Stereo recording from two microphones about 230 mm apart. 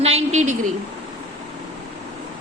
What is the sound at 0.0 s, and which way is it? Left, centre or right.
Speech, right.